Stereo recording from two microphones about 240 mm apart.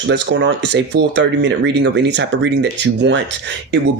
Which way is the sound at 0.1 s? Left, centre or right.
Right.